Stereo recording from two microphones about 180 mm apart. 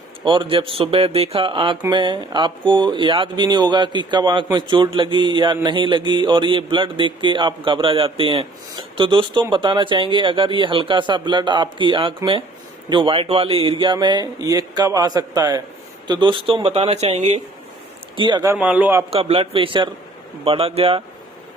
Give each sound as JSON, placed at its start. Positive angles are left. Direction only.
{"t": 0.3, "sound": "speech", "side_deg": -30}
{"t": 18.2, "sound": "speech", "side_deg": -25}
{"t": 18.5, "sound": "a man's voice", "side_deg": -5}
{"t": 19.1, "sound": "speech", "side_deg": -35}